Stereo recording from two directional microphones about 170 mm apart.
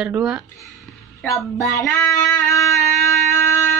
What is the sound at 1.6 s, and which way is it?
Music, 20° left (ahead or behind).